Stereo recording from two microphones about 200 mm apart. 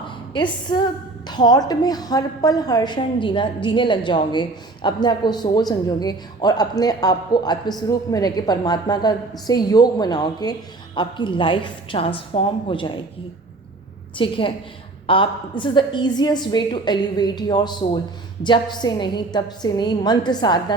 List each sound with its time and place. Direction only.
0.3 s a woman's voice: 20° left (ahead or behind)
14.2 s a woman's voice: 25° left (ahead or behind)